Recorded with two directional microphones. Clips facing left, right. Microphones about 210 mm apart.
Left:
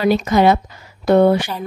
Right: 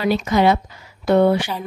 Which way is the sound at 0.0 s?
45° left (ahead or behind).